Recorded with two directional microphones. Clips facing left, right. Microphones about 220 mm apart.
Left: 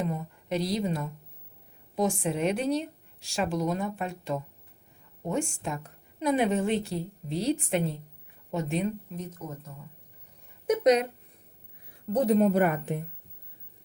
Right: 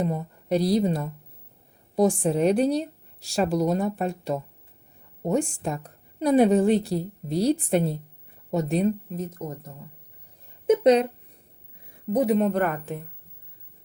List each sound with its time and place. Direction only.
0.0 s a woman's voice: 35° right (ahead or behind)
10.7 s speech: 30° right (ahead or behind)
12.0 s speech: 10° right (ahead or behind); by 13.0 s 15° left (ahead or behind)